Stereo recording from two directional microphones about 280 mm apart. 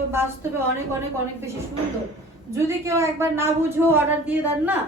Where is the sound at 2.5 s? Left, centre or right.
Centre.